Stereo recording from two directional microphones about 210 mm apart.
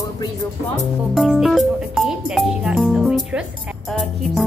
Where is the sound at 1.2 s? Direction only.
Centre (ahead or behind).